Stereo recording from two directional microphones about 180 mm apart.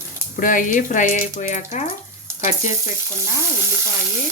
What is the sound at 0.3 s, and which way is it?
Speech, 50° left (ahead or behind).